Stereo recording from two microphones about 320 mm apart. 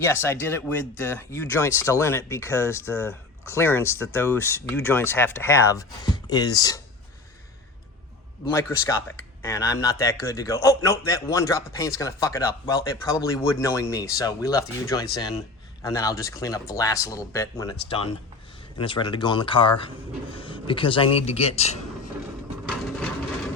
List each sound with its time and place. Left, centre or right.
0.0 s speech: centre
8.4 s speech: centre